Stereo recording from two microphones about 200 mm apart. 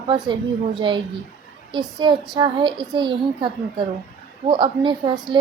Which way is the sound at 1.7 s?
Centre (ahead or behind).